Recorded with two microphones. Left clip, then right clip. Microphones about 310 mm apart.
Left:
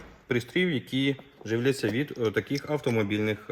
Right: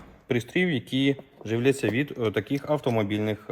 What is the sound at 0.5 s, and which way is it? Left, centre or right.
Speech, centre.